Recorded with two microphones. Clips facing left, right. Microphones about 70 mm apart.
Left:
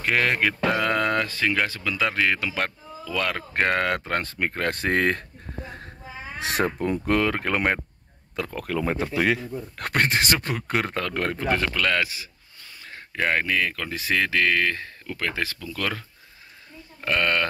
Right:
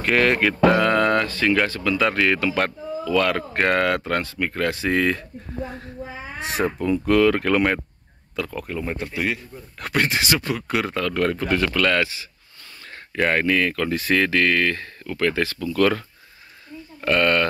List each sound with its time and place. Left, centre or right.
0.0 s speech: centre; by 4.2 s left
4.2 s speech: left
6.4 s speech: left
6.8 s speech: left
8.5 s speech: left
9.9 s speech: left
11.7 s speech: centre
17.0 s speech: centre